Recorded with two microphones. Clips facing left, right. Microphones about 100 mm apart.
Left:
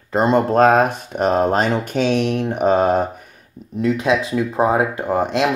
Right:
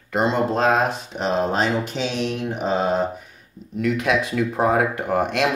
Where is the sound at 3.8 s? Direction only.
30° left (ahead or behind).